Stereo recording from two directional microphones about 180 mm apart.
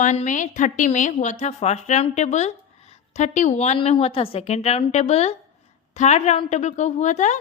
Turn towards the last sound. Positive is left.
turn(degrees=40)  # may be behind; listen again after turning